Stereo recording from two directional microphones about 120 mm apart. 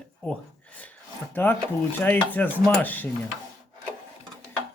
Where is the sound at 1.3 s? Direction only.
15° left (ahead or behind).